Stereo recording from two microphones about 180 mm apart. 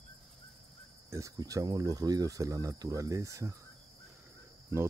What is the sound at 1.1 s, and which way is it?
Speech, 20° right (ahead or behind).